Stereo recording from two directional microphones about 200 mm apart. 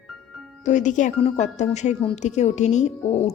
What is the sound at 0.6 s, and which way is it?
Speech, 40° left (ahead or behind).